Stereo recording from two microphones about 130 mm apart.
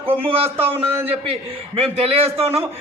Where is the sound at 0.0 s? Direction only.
15° right (ahead or behind).